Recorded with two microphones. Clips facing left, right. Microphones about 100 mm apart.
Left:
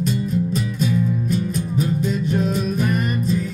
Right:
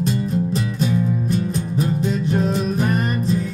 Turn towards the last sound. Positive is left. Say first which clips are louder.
# right 1 dB
turn(degrees=-35)  # may be behind; listen again after turning